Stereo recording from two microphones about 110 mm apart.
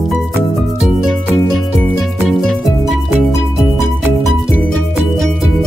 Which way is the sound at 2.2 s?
Centre (ahead or behind).